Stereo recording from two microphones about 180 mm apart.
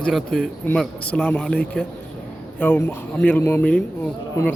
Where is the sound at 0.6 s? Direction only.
5° left (ahead or behind).